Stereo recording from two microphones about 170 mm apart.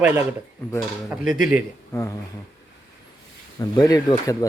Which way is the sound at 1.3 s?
5° right (ahead or behind).